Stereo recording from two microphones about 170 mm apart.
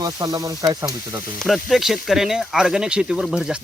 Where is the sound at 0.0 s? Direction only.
20° right (ahead or behind).